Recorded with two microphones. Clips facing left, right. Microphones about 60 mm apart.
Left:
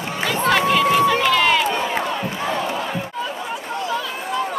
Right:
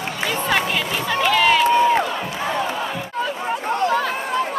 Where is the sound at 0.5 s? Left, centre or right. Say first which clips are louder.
Left 6 dB; centre.